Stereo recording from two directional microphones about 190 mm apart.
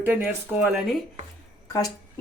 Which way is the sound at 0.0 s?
10° right (ahead or behind).